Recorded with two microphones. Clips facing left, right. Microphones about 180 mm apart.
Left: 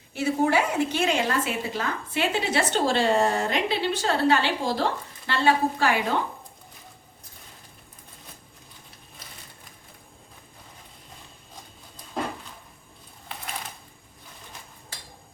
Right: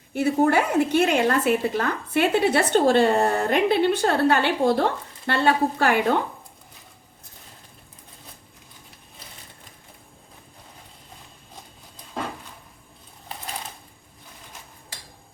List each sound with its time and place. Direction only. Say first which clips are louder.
0.1 s a woman's voice: right 3 dB; 55° right (ahead or behind)